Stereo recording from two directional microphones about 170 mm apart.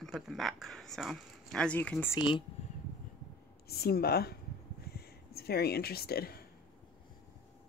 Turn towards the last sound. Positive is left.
turn(degrees=65)  # may be behind; listen again after turning